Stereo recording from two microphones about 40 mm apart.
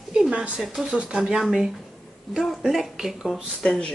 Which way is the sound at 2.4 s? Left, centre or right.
Centre.